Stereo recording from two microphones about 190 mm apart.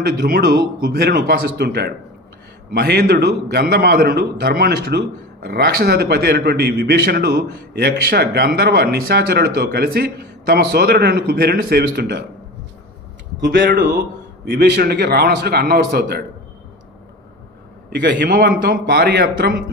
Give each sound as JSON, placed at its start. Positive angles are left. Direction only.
{"t": 0.0, "sound": "a man's voice", "side_deg": -55}
{"t": 13.4, "sound": "a man's voice", "side_deg": -50}
{"t": 18.3, "sound": "a man's voice", "side_deg": -65}
{"t": 18.6, "sound": "a man's voice", "side_deg": -50}